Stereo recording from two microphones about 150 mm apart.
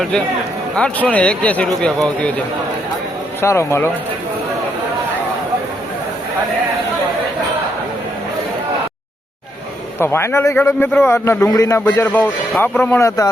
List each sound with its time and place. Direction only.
0.8 s a man's voice: 10° left (ahead or behind)
3.4 s a man's voice: 20° left (ahead or behind)
10.0 s a man's voice: 15° left (ahead or behind)